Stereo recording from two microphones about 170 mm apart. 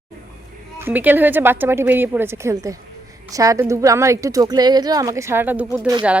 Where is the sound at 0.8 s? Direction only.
10° right (ahead or behind).